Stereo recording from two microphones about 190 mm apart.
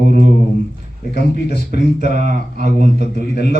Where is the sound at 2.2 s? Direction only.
40° right (ahead or behind).